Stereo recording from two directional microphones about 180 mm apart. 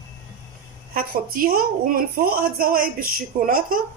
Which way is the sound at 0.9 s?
55° right (ahead or behind).